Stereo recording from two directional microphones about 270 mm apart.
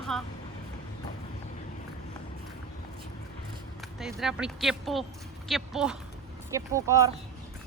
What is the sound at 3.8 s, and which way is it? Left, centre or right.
Speech, centre.